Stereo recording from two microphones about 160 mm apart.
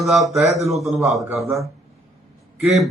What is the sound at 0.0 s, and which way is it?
Speech, centre (ahead or behind).